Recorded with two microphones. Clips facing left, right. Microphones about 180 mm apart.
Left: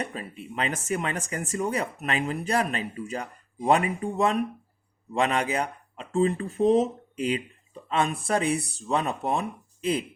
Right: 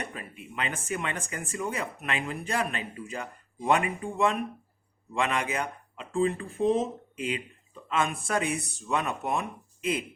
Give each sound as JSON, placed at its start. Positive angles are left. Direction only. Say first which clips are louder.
{"t": 0.0, "sound": "speech", "louder": "left 5 dB", "side_deg": 30}